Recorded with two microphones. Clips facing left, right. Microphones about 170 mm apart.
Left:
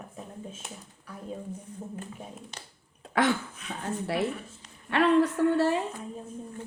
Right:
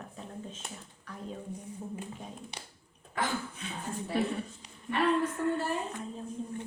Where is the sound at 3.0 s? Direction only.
80° left.